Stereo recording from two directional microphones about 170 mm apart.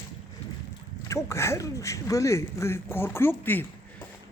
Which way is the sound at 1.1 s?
15° left (ahead or behind).